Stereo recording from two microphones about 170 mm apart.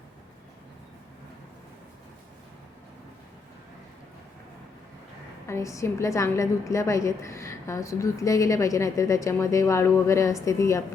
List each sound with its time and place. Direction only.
5.5 s a woman's voice: 15° left (ahead or behind)